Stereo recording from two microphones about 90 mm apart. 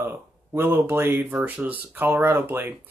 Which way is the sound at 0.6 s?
25° right (ahead or behind).